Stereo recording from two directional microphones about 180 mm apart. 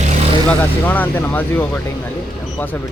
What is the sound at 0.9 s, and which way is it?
Speech, 10° left (ahead or behind).